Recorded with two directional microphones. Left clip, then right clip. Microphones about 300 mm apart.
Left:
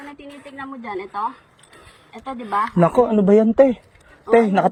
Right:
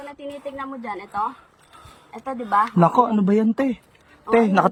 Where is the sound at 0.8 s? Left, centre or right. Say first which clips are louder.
Left 1 dB; centre.